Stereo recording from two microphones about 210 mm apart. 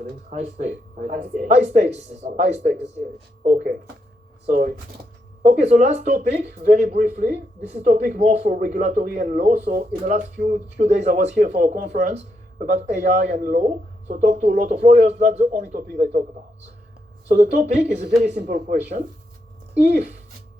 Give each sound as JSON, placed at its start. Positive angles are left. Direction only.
{"t": 0.3, "sound": "speech", "side_deg": -35}
{"t": 6.1, "sound": "speech", "side_deg": -45}
{"t": 17.2, "sound": "speech", "side_deg": -35}